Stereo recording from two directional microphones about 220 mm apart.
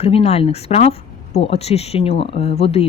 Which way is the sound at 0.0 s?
30° left (ahead or behind).